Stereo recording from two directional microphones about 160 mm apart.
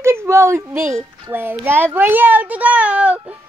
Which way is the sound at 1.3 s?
15° right (ahead or behind).